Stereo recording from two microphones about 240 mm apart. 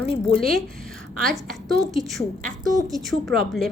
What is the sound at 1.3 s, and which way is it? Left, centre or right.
A woman's voice, centre.